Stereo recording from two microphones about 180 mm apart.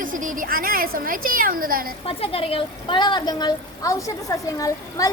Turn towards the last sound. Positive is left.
turn(degrees=20)  # may be behind; listen again after turning